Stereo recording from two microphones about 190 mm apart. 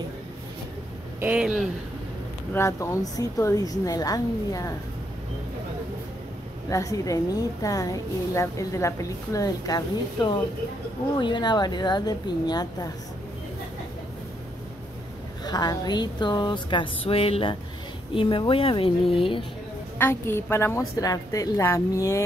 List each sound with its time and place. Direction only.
1.2 s speech: 5° right (ahead or behind)
2.5 s a woman's voice: 15° left (ahead or behind)
6.7 s a woman's voice: 15° left (ahead or behind)
15.4 s a woman's voice: 20° left (ahead or behind)
20.0 s a woman's voice: 15° left (ahead or behind)